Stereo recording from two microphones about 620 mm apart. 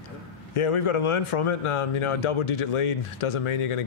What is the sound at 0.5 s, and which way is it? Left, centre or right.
Speech, left.